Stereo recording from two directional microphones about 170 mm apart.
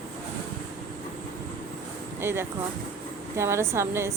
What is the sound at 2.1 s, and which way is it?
A woman's voice, 15° right (ahead or behind).